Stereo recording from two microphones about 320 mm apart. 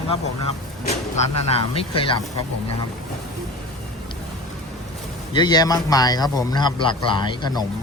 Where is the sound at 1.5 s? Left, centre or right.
Centre.